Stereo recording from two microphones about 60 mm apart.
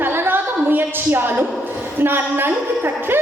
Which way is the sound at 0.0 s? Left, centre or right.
Right.